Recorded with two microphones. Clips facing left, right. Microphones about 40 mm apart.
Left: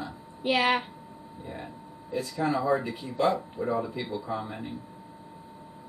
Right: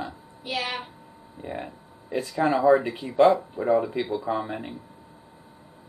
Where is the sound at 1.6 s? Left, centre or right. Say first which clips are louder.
Right 3 dB; right.